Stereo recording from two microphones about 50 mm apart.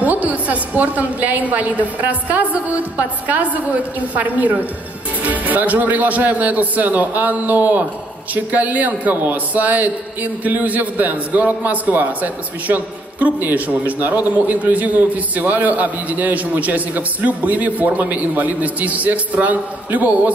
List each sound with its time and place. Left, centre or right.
0.0 s a man's voice: right